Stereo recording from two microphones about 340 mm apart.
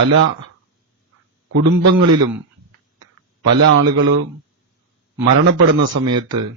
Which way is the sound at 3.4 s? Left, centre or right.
Right.